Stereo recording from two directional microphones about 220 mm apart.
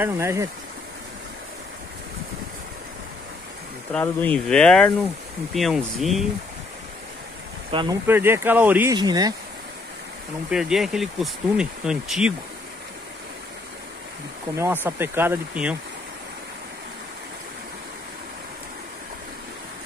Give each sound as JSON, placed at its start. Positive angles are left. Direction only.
{"t": 0.0, "sound": "speech", "side_deg": -10}
{"t": 3.9, "sound": "speech", "side_deg": 5}
{"t": 7.7, "sound": "speech", "side_deg": -20}
{"t": 8.1, "sound": "speech", "side_deg": -10}
{"t": 10.5, "sound": "speech", "side_deg": 0}
{"t": 14.5, "sound": "speech", "side_deg": -10}